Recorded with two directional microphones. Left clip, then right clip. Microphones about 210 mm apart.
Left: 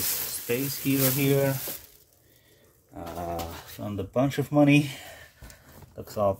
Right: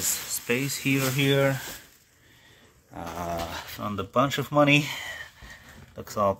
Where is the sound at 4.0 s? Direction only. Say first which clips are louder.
Right 2 dB; 5° right (ahead or behind).